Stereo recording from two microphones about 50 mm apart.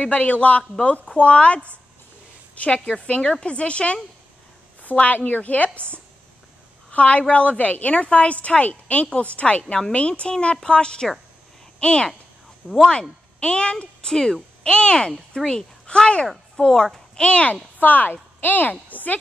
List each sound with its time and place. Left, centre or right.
0.0 s a woman's voice: left
4.8 s a woman's voice: left
7.0 s a woman's voice: left
17.7 s a woman's voice: left